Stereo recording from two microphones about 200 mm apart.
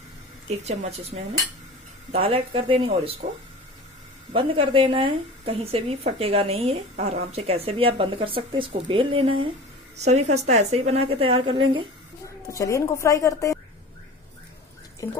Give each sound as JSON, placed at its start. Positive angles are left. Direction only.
{"t": 0.7, "sound": "a woman's voice", "side_deg": -30}
{"t": 2.1, "sound": "speech", "side_deg": -25}
{"t": 4.3, "sound": "a woman's voice", "side_deg": -25}
{"t": 12.4, "sound": "speech", "side_deg": 15}